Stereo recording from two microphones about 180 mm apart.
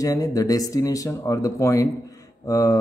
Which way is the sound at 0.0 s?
20° left (ahead or behind).